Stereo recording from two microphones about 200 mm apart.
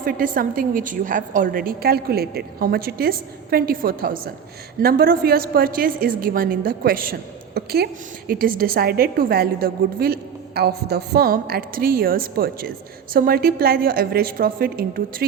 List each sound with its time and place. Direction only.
0.0 s a woman's voice: 45° right (ahead or behind)